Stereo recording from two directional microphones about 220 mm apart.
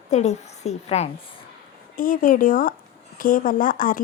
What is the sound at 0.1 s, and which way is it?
Speech, 30° left (ahead or behind).